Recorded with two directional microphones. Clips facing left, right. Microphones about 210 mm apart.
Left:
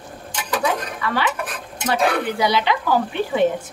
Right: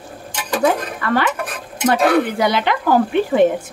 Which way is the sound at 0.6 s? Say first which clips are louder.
Right 6 dB; 50° right (ahead or behind).